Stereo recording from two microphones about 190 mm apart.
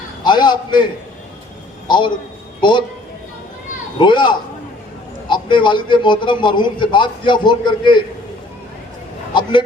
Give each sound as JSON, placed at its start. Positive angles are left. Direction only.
{"t": 0.3, "sound": "a man's voice", "side_deg": 25}
{"t": 1.9, "sound": "a man's voice", "side_deg": 25}
{"t": 3.9, "sound": "a man's voice", "side_deg": 25}
{"t": 9.3, "sound": "a sound", "side_deg": 25}